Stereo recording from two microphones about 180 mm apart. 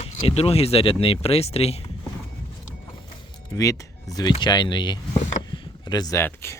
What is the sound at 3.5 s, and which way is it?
Speech, 20° left (ahead or behind).